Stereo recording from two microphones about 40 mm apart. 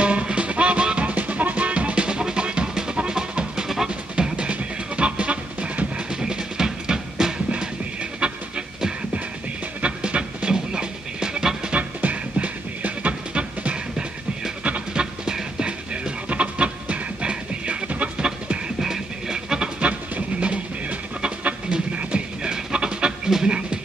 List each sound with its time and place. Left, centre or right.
0.0 s music: right
1.1 s music: right; by 4.3 s centre
4.4 s music: right
6.0 s music: centre
7.5 s music: right
11.7 s music: right; by 15.7 s centre
15.9 s music: right
17.8 s music: right
18.8 s music: centre
19.8 s a sound: right
22.4 s a sound: right